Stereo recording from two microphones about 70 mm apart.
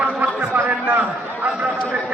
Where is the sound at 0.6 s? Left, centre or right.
Right.